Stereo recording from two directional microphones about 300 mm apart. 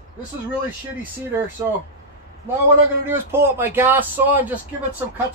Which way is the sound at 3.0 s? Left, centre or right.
Centre.